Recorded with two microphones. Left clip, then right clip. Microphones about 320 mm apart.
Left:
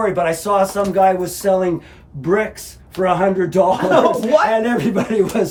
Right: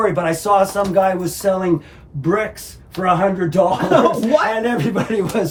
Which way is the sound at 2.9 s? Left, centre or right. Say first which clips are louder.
Left 1 dB; centre.